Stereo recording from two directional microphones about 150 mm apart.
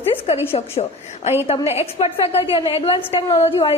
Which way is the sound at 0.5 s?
45° left (ahead or behind).